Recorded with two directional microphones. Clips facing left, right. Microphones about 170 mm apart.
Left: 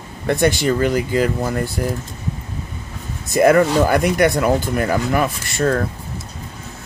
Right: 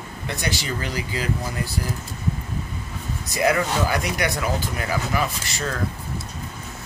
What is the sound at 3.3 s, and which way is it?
Speech, 50° left (ahead or behind).